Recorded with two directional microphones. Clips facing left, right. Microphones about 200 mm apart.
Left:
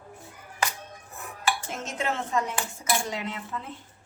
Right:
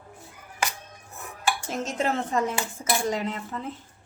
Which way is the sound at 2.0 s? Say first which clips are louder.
Right 2 dB; 35° right (ahead or behind).